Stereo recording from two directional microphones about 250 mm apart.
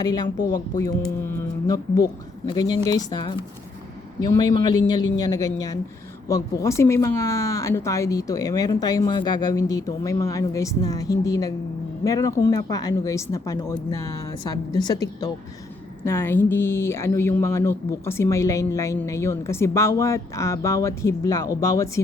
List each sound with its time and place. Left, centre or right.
0.0 s speech: centre